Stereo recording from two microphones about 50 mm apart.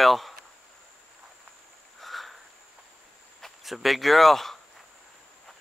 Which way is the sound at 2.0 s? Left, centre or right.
Centre.